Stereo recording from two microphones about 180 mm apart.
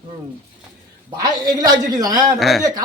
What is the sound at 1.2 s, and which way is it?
A man's voice, 20° right (ahead or behind).